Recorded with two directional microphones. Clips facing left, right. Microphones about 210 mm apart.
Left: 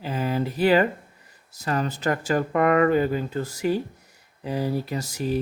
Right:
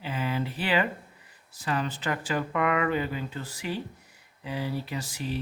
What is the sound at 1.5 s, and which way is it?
Speech, 45° left (ahead or behind).